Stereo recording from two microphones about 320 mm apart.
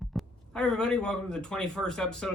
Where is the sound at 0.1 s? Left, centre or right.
Centre.